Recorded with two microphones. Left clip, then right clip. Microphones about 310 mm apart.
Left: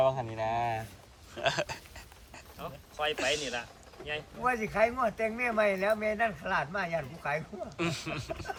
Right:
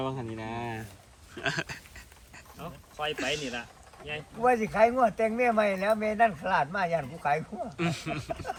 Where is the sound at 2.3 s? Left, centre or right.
Centre.